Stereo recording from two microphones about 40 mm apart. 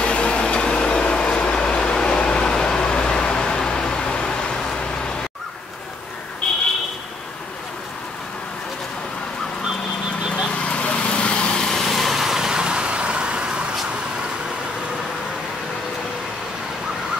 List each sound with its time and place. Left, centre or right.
0.0 s vehicle: left
10.7 s vehicle: left
11.6 s vehicle: centre
11.9 s vehicle: centre; by 13.7 s right